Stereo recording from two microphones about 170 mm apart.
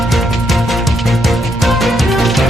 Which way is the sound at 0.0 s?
Centre (ahead or behind).